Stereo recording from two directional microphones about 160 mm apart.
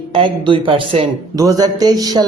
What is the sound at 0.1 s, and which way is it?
A man's voice, 30° right (ahead or behind).